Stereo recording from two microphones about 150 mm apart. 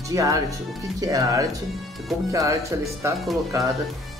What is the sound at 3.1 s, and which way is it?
Speech, centre (ahead or behind).